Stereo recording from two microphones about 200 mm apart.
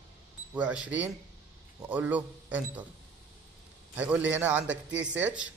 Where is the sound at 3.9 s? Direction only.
5° right (ahead or behind).